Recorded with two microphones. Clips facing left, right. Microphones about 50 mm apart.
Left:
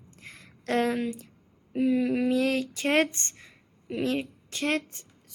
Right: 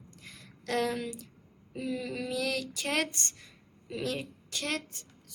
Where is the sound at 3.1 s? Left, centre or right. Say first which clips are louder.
Even; left.